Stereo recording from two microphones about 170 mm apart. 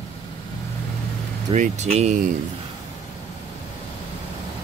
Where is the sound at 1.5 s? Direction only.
40° right (ahead or behind).